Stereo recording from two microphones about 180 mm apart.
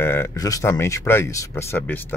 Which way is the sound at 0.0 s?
15° left (ahead or behind).